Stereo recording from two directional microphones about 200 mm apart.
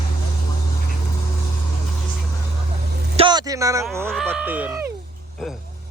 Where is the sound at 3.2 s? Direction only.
20° right (ahead or behind).